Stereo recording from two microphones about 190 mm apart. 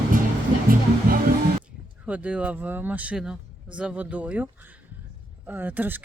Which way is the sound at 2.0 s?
5° right (ahead or behind).